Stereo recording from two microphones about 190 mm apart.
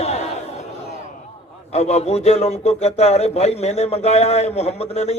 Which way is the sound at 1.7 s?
35° left (ahead or behind).